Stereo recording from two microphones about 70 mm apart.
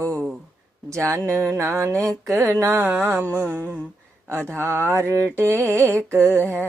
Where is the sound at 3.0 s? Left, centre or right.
Right.